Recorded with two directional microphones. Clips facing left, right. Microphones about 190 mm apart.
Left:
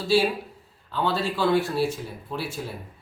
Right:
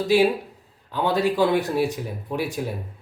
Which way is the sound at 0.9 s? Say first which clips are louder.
Right 4 dB; 15° right (ahead or behind).